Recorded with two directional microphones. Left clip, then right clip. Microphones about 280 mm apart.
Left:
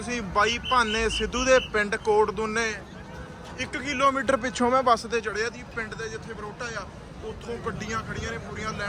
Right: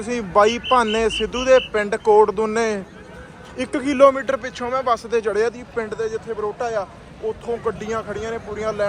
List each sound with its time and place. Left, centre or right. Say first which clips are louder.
0.0 s speech: right 8 dB; centre
4.4 s speech: left 1 dB; left
5.0 s speech: right 8 dB; centre